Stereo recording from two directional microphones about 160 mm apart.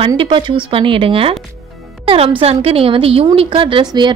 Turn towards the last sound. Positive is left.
turn(degrees=-30)  # may be behind; listen again after turning